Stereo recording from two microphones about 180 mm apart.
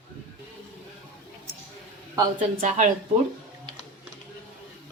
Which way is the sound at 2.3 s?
40° right (ahead or behind).